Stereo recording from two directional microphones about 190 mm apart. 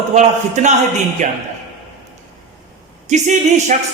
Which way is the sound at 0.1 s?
40° right (ahead or behind).